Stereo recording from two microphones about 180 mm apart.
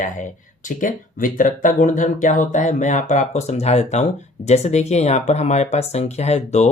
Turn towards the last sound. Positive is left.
turn(degrees=35)  # may be behind; listen again after turning